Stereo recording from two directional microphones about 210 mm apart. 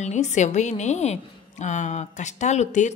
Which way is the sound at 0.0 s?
35° left (ahead or behind).